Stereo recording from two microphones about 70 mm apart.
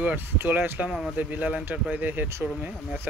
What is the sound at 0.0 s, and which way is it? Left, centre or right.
Speech, right.